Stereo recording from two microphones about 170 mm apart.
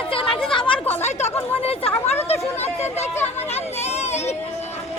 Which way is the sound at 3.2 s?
40° left (ahead or behind).